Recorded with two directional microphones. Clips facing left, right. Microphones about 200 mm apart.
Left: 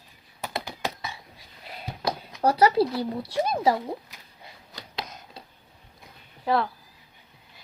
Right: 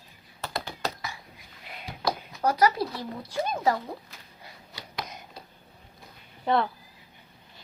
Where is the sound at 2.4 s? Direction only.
30° left (ahead or behind).